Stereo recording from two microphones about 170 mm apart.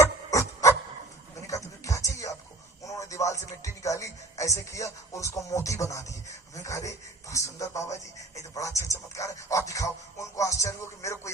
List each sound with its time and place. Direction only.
0.0 s a sound: 20° left (ahead or behind)
2.8 s music: 20° left (ahead or behind)
6.6 s a man's voice: 20° left (ahead or behind)